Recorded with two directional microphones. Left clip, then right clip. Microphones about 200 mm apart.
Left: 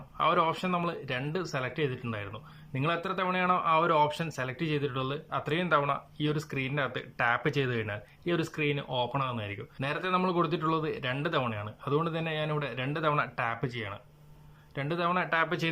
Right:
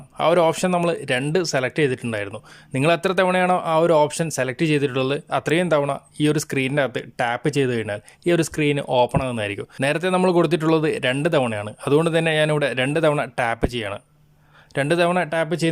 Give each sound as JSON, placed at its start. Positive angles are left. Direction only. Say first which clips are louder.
{"t": 0.2, "sound": "speech", "louder": "right 9 dB", "side_deg": -45}